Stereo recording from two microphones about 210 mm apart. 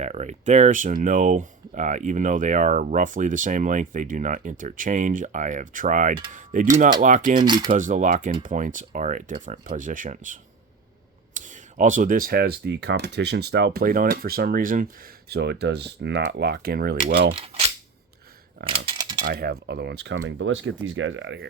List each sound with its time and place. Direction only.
0.0 s speech: 35° right (ahead or behind)
6.3 s a sound: 40° right (ahead or behind)
7.0 s speech: 40° right (ahead or behind)
7.4 s speech: 20° right (ahead or behind)
7.7 s speech: 40° right (ahead or behind)
17.3 s cap gun: 30° right (ahead or behind)
18.6 s speech: 25° right (ahead or behind)
19.2 s speech: 45° right (ahead or behind); by 21.3 s 65° right (ahead or behind)